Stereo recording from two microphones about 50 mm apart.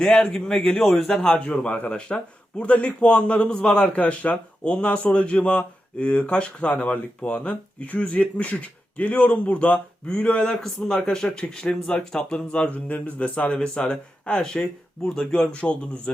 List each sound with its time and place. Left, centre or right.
0.0 s speech: left
0.3 s speech: centre
0.8 s a man's voice: centre
1.1 s speech: centre
10.6 s speech: centre